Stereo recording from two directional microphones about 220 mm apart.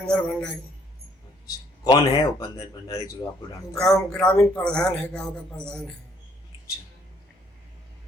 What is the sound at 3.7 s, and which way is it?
A man's voice, 5° left (ahead or behind).